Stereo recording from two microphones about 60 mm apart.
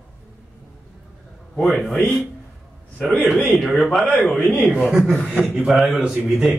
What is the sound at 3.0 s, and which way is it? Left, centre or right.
Speech, left.